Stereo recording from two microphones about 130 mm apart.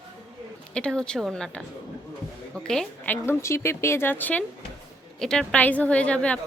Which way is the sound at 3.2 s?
20° left (ahead or behind).